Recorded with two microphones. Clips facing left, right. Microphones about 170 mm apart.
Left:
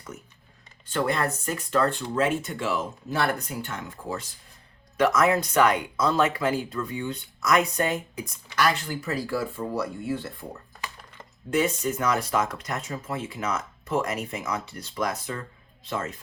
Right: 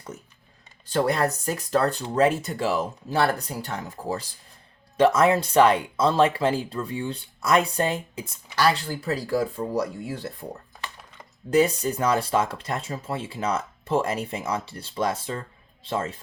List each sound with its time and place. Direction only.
0.9 s speech: 35° right (ahead or behind)
11.5 s a man's voice: 35° right (ahead or behind)